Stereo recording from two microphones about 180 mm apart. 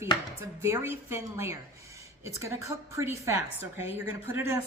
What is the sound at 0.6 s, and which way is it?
A woman's voice, 15° right (ahead or behind).